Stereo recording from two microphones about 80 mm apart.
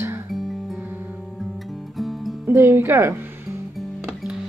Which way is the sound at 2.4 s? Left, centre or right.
Right.